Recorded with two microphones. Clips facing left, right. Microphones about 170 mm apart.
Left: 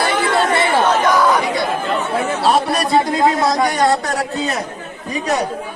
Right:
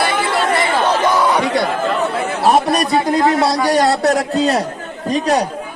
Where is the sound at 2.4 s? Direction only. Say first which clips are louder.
Right 4 dB; 20° right (ahead or behind).